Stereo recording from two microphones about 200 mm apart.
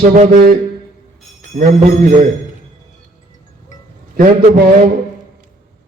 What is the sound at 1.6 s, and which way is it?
Speech, 45° right (ahead or behind).